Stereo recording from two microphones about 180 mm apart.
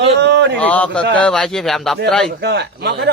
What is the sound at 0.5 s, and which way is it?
Speech, 10° left (ahead or behind).